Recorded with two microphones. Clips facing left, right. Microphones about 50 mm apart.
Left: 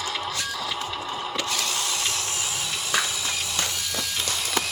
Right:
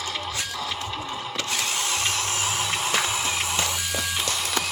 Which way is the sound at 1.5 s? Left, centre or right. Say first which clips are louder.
Right 1 dB; right.